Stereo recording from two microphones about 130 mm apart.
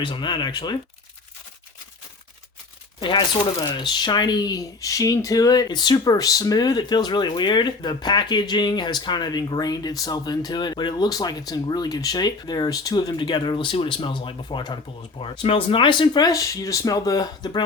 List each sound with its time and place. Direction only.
0.0 s speech: 40° left (ahead or behind)
3.0 s speech: 35° left (ahead or behind)